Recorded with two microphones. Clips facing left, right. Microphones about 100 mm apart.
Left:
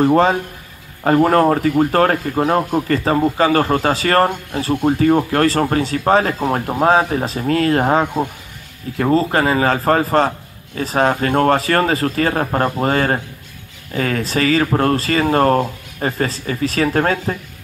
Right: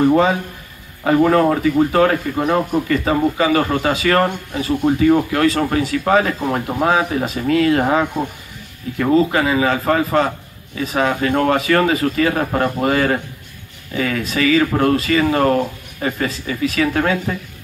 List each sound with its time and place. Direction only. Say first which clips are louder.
0.0 s a man's voice: left 1 dB; 35° left (ahead or behind)